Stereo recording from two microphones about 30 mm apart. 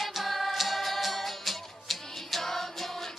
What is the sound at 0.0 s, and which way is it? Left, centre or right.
Music, centre.